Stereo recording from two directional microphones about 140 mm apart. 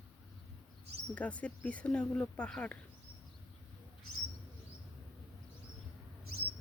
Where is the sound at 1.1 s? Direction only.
10° left (ahead or behind).